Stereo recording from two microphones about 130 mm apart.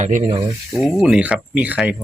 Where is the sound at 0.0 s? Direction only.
80° right.